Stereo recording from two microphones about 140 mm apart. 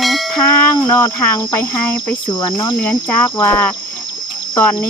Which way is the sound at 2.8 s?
10° left (ahead or behind).